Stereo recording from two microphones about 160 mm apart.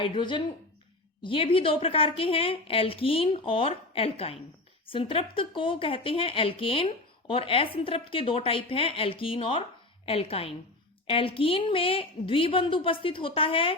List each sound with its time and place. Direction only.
0.0 s a woman's voice: 30° left (ahead or behind)